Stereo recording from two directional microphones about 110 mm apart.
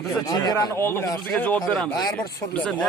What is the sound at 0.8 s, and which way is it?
A man's voice, 20° left (ahead or behind).